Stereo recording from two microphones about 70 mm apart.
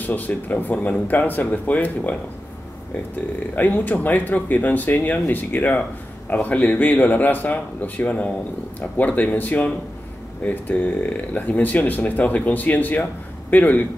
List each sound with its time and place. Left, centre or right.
0.0 s speech: left
3.5 s speech: left